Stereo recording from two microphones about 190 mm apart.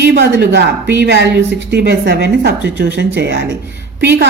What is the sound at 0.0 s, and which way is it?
Speech, 60° right (ahead or behind).